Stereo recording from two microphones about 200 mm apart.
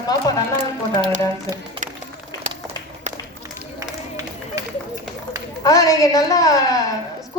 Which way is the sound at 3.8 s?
15° right (ahead or behind).